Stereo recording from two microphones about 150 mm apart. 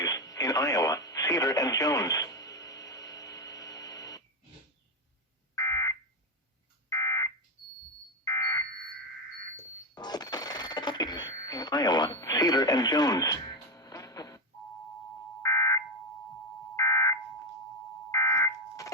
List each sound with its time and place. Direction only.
0.0 s radio: 25° left (ahead or behind)
5.5 s fire alarm: 20° left (ahead or behind)
9.9 s cash register: 25° left (ahead or behind)
15.4 s fire alarm: 20° left (ahead or behind)